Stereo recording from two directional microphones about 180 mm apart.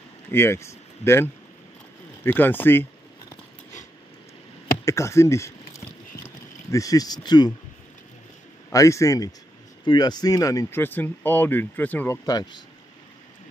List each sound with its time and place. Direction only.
0.3 s speech: 15° left (ahead or behind)
2.2 s a sound: 10° left (ahead or behind)
4.8 s speech: 15° left (ahead or behind)
8.7 s speech: 15° left (ahead or behind)
12.3 s speech: 25° left (ahead or behind)